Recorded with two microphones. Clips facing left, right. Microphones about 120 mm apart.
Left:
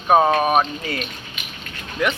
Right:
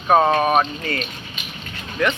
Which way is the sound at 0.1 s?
5° left (ahead or behind).